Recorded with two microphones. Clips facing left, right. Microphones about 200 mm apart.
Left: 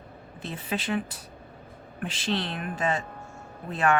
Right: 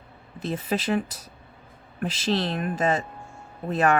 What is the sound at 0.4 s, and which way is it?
Speech, 40° right (ahead or behind).